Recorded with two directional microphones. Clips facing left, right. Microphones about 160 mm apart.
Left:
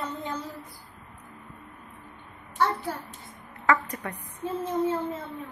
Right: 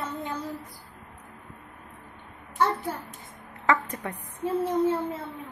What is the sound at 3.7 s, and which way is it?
Speech, 25° right (ahead or behind).